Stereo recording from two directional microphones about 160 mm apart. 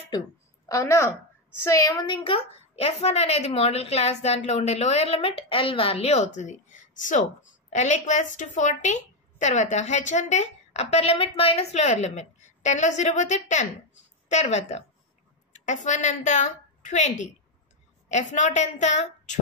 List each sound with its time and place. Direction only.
0.7 s a woman's voice: 20° left (ahead or behind); by 19.4 s 50° left (ahead or behind)